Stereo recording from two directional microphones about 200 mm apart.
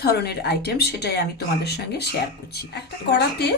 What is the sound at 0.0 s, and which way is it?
Speech, 55° left (ahead or behind).